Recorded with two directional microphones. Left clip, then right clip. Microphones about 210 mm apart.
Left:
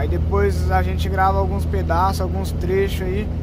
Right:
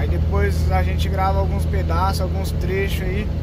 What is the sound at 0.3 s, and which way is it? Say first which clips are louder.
Speech: left 4 dB; 20° left (ahead or behind).